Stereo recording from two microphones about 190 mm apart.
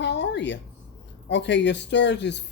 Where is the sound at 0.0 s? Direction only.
70° left (ahead or behind).